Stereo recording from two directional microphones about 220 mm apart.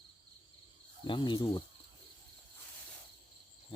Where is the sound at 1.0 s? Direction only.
20° left (ahead or behind).